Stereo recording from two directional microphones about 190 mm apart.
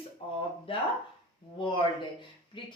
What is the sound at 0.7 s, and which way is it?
Speech, 30° left (ahead or behind).